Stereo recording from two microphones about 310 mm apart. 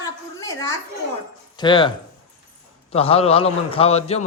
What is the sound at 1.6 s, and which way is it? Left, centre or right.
Speech, centre.